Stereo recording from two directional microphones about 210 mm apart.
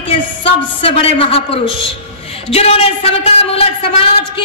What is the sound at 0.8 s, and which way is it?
A man's voice, 25° left (ahead or behind).